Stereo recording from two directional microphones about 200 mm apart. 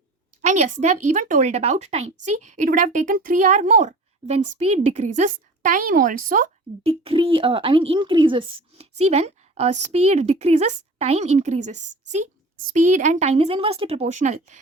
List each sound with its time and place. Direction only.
0.4 s speech: 35° right (ahead or behind)
7.0 s speech: 25° right (ahead or behind)